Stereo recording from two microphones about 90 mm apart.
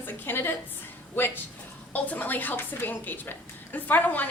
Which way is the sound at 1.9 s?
20° left (ahead or behind).